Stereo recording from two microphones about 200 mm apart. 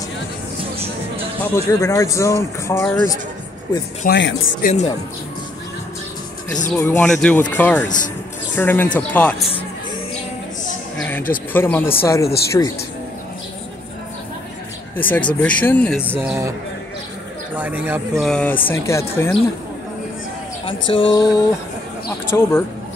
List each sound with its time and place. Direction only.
1.4 s speech: 15° left (ahead or behind)
4.2 s speech: 70° left (ahead or behind)
4.6 s speech: 45° left (ahead or behind)
6.8 s speech: 10° left (ahead or behind)
11.0 s speech: 10° left (ahead or behind)
15.0 s speech: 10° left (ahead or behind)
16.0 s speech: 10° right (ahead or behind)
17.6 s speech: 10° right (ahead or behind)
18.2 s speech: 5° left (ahead or behind)
20.6 s speech: 25° left (ahead or behind)